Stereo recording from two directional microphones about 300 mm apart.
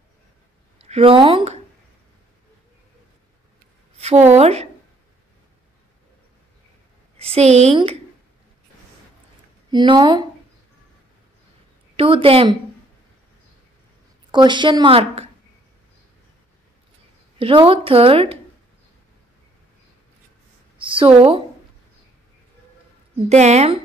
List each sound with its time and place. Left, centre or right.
0.7 s speech: centre
3.9 s a sound: right
4.4 s a woman's voice: right
7.2 s a woman's voice: right
9.7 s a woman's voice: centre
12.0 s a woman's voice: centre
14.3 s a woman's voice: centre
17.4 s a woman's voice: centre
20.7 s a woman's voice: centre
23.2 s a woman's voice: right